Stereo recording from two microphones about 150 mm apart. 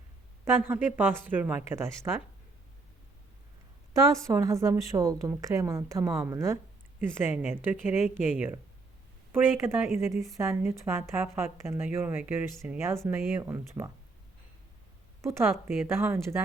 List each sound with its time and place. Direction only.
0.4 s speech: 15° right (ahead or behind)
3.9 s a woman's voice: 20° right (ahead or behind)
15.2 s speech: 20° right (ahead or behind)